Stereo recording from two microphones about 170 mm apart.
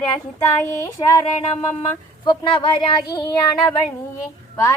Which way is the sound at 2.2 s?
30° left (ahead or behind).